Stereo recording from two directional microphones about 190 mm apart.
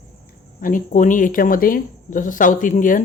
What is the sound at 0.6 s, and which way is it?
Speech, 45° left (ahead or behind).